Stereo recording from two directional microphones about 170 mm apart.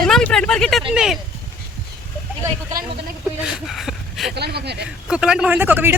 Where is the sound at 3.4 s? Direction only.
5° right (ahead or behind).